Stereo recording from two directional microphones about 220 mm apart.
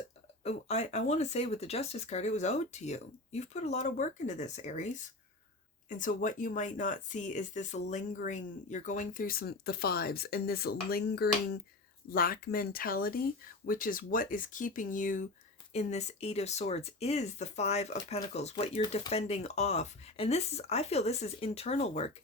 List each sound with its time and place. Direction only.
0.4 s speech: 30° left (ahead or behind)
6.0 s speech: 35° left (ahead or behind)